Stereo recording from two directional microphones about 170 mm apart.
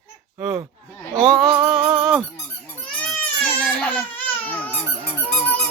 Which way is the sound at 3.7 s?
10° left (ahead or behind).